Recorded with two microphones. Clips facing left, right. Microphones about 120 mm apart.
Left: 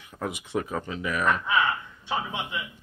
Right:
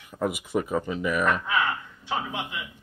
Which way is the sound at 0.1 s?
5° right (ahead or behind).